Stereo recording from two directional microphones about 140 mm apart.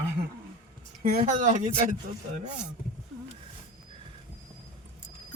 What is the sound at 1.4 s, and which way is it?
Speech, 60° right (ahead or behind).